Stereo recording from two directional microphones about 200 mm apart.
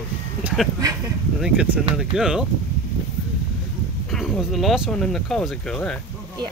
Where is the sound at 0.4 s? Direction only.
5° right (ahead or behind).